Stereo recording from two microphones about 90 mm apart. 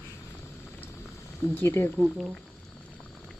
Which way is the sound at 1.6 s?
25° left (ahead or behind).